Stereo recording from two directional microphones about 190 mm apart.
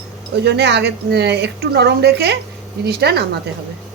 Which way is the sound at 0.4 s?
60° right (ahead or behind).